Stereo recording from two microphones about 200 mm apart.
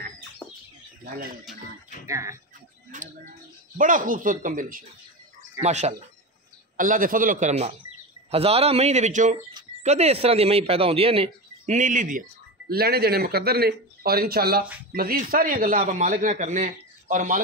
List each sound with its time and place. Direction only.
2.0 s speech: 15° right (ahead or behind)
3.7 s a man's voice: 40° right (ahead or behind)